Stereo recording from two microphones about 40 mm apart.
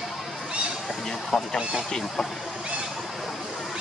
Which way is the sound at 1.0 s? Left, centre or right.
Centre.